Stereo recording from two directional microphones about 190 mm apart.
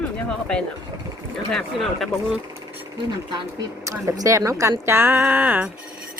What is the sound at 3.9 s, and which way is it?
Speech, 15° right (ahead or behind).